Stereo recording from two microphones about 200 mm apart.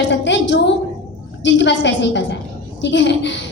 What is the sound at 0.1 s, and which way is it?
A woman's voice, 65° left (ahead or behind).